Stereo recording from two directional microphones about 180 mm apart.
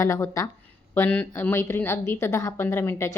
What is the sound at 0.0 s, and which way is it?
Speech, 15° left (ahead or behind).